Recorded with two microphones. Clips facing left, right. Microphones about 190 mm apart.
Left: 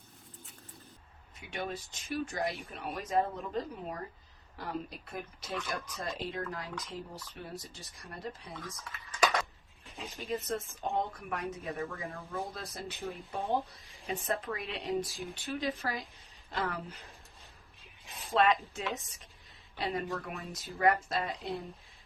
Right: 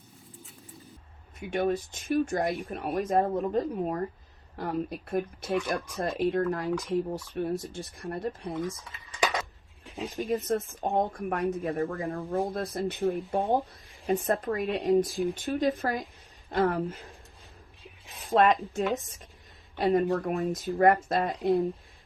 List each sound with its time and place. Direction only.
1.4 s speech: 50° right (ahead or behind)
9.2 s a sound: centre (ahead or behind)
10.2 s speech: 55° right (ahead or behind)
12.1 s speech: 35° right (ahead or behind)
12.5 s speech: 55° right (ahead or behind)
18.0 s a sound: centre (ahead or behind)
18.9 s speech: 50° right (ahead or behind)